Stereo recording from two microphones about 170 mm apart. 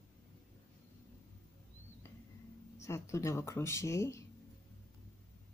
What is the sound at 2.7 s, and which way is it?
Speech, 15° left (ahead or behind).